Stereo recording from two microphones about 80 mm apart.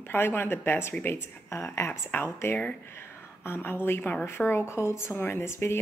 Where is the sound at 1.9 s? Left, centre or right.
Left.